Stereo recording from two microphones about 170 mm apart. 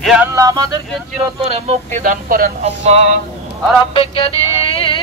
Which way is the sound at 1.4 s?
40° right (ahead or behind).